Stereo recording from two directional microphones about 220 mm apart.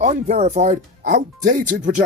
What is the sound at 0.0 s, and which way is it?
Speech, 30° right (ahead or behind).